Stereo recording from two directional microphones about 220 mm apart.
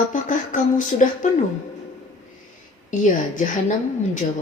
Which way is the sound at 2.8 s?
35° left (ahead or behind).